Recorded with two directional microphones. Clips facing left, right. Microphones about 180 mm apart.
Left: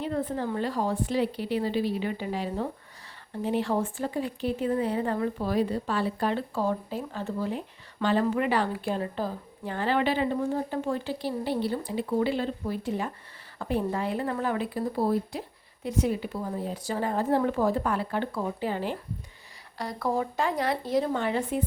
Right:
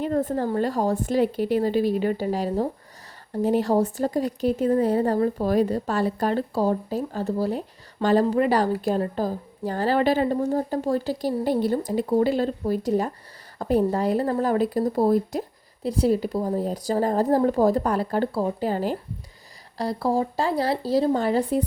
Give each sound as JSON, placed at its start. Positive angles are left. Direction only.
{"t": 0.0, "sound": "a woman's voice", "side_deg": -45}